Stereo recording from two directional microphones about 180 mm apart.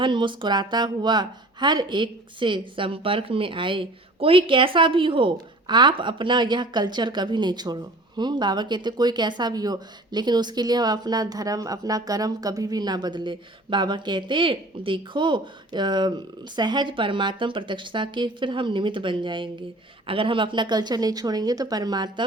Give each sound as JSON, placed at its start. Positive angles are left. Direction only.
{"t": 0.0, "sound": "speech", "side_deg": -25}